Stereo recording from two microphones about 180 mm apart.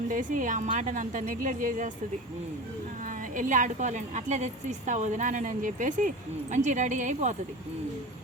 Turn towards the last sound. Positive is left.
turn(degrees=-40)  # may be behind; listen again after turning